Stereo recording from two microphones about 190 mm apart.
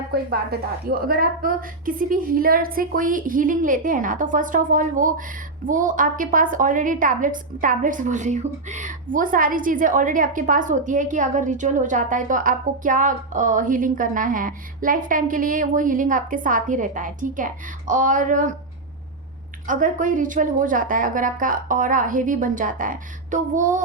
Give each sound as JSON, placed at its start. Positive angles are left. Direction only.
{"t": 0.1, "sound": "a woman's voice", "side_deg": -55}
{"t": 19.6, "sound": "a woman's voice", "side_deg": -45}